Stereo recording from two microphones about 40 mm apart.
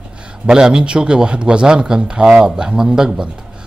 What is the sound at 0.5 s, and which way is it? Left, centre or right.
A man's voice, centre.